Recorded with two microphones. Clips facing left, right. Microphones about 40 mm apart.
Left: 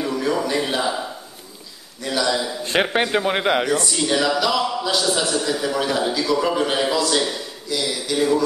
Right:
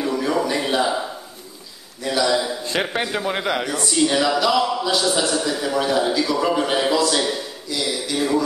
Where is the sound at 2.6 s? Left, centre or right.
Left.